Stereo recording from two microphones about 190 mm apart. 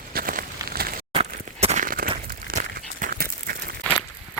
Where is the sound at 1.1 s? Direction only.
35° right (ahead or behind).